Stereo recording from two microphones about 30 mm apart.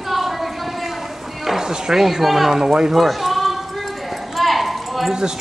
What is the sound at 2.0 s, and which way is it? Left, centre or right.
Speech, centre.